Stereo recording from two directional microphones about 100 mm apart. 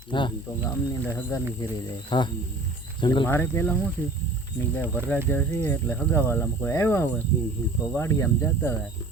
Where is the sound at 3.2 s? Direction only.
25° left (ahead or behind).